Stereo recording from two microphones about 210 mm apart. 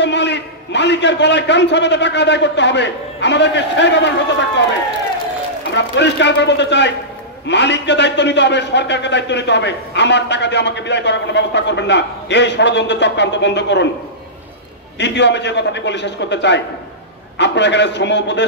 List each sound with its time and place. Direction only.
0.0 s a man's voice: 55° left (ahead or behind)
5.7 s a man's voice: 55° left (ahead or behind)
15.0 s a man's voice: 55° left (ahead or behind)